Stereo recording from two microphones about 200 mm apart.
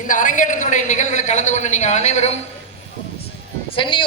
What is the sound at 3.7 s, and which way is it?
Speech, 25° left (ahead or behind).